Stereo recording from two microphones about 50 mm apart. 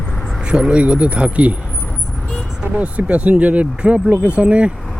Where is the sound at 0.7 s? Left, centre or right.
Right.